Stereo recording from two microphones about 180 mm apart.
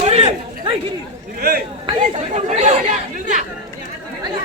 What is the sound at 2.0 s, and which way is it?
Speech, 40° right (ahead or behind).